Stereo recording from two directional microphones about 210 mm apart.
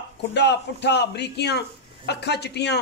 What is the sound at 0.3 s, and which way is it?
A man's voice, 55° left (ahead or behind).